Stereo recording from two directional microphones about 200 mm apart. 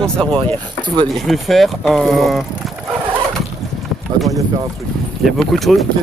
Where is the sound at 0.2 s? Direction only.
25° right (ahead or behind).